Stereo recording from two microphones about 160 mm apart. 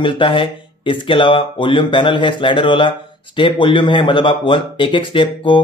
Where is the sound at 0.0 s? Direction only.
35° left (ahead or behind).